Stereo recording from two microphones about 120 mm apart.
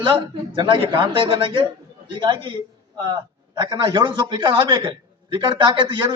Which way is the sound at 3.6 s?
35° right (ahead or behind).